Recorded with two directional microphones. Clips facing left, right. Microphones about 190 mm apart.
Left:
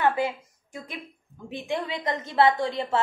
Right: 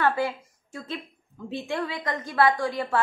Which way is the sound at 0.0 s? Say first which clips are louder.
Even; 20° left (ahead or behind).